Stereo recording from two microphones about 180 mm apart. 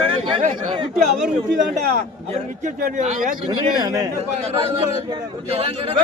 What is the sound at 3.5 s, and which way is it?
Speech, 20° right (ahead or behind).